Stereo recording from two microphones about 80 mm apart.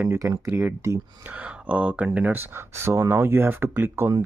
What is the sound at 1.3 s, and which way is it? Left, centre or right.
Speech, centre.